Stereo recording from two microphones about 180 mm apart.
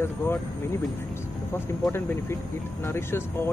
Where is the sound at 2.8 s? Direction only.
15° left (ahead or behind).